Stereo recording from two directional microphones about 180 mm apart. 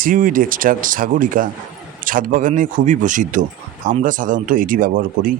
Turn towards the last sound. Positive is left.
turn(degrees=-50)  # may be behind; listen again after turning